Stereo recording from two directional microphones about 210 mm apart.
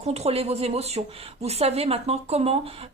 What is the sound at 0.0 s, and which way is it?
Speech, 30° right (ahead or behind).